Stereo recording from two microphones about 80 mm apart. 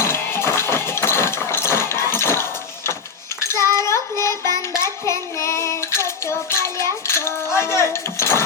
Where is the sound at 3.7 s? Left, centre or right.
Left.